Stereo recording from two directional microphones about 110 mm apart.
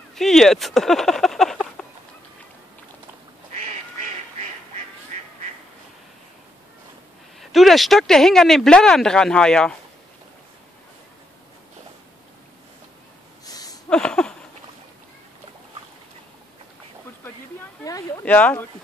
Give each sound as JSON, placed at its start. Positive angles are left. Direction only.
{"t": 0.1, "sound": "speech", "side_deg": 5}
{"t": 4.0, "sound": "duck", "side_deg": -90}
{"t": 7.3, "sound": "speech", "side_deg": 0}
{"t": 13.5, "sound": "a sound", "side_deg": 35}
{"t": 13.8, "sound": "a sound", "side_deg": 5}
{"t": 18.2, "sound": "speech", "side_deg": 15}